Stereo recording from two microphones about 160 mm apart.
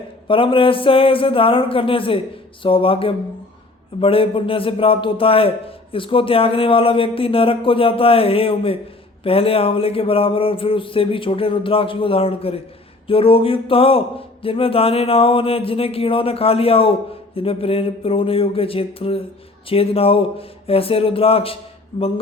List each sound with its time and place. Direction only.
0.3 s a man's voice: 35° left (ahead or behind)